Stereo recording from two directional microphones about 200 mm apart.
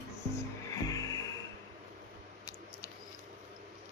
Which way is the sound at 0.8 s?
15° left (ahead or behind).